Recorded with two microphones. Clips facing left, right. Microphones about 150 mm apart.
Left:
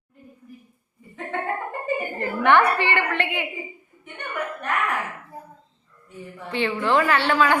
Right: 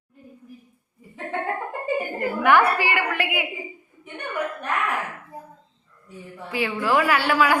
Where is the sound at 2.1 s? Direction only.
10° right (ahead or behind).